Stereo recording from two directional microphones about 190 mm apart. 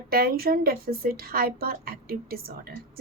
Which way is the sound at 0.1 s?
50° right (ahead or behind).